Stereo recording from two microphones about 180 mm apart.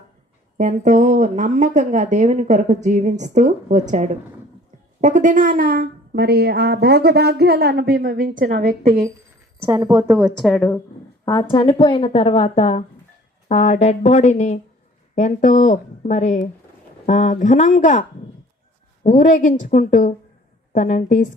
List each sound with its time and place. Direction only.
0.5 s a woman's voice: 45° right (ahead or behind)
9.6 s a woman's voice: 20° right (ahead or behind)
10.1 s a woman's voice: 5° right (ahead or behind)
11.3 s a woman's voice: 25° left (ahead or behind); by 18.0 s 45° left (ahead or behind)
19.0 s speech: 45° left (ahead or behind)